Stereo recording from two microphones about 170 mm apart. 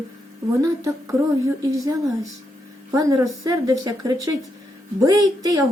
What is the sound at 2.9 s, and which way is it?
A woman's voice, 20° right (ahead or behind).